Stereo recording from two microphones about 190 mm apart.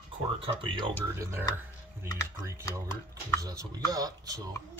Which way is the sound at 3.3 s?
20° right (ahead or behind).